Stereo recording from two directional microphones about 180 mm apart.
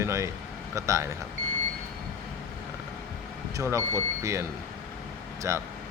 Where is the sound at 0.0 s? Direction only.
15° right (ahead or behind).